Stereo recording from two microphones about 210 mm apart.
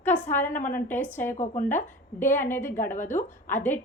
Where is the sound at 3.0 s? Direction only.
35° left (ahead or behind).